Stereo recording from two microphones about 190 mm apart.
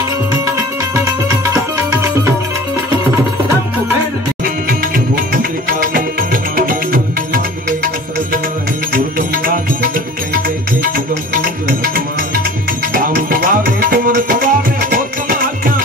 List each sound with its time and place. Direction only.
1.5 s music: 15° right (ahead or behind)
5.7 s music: 45° right (ahead or behind)
12.9 s music: 50° right (ahead or behind)